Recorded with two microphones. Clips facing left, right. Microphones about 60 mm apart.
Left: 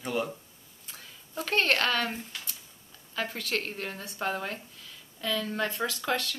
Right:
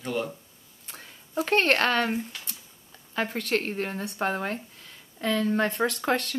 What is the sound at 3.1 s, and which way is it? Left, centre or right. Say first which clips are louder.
Speech: right 5 dB; right.